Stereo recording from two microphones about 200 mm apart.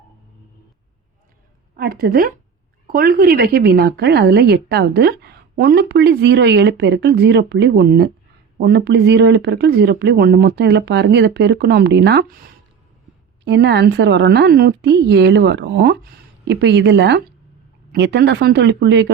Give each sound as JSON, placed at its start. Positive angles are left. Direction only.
{"t": 1.7, "sound": "a woman's voice", "side_deg": -50}